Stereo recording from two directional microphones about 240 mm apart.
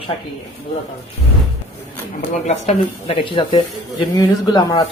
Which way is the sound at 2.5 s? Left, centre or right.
Left.